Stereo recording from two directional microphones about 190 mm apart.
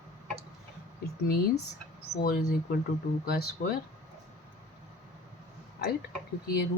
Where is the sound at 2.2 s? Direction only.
50° left (ahead or behind).